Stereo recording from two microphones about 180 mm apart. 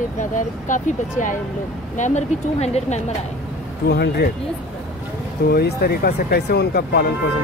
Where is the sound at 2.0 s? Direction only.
40° left (ahead or behind).